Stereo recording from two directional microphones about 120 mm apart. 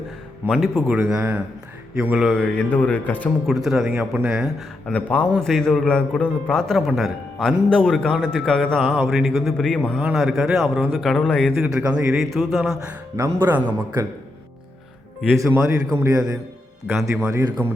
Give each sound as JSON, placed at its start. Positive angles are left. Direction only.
{"t": 0.4, "sound": "a man's voice", "side_deg": 0}
{"t": 2.0, "sound": "speech", "side_deg": -10}
{"t": 2.2, "sound": "music", "side_deg": 5}
{"t": 3.4, "sound": "a man's voice", "side_deg": 0}
{"t": 4.9, "sound": "a man's voice", "side_deg": 10}
{"t": 10.0, "sound": "a man's voice", "side_deg": -5}
{"t": 12.1, "sound": "a man's voice", "side_deg": 0}
{"t": 12.7, "sound": "speech", "side_deg": -25}
{"t": 15.4, "sound": "a man's voice", "side_deg": -25}
{"t": 16.9, "sound": "a man's voice", "side_deg": 0}
{"t": 17.2, "sound": "speech", "side_deg": -25}